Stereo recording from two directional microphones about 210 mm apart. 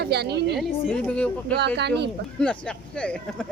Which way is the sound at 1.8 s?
55° right (ahead or behind).